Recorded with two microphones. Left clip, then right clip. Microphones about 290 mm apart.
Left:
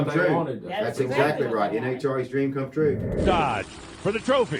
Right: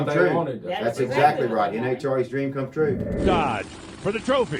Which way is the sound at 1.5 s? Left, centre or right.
Centre.